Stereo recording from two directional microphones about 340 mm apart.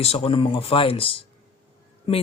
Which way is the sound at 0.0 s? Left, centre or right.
Centre.